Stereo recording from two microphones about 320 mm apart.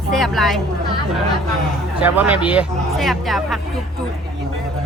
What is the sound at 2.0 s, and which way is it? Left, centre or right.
Speech, centre.